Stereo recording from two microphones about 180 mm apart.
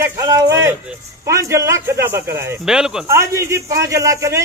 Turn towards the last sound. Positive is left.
turn(degrees=-15)  # may be behind; listen again after turning